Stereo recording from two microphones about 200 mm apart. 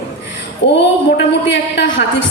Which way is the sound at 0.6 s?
60° left (ahead or behind).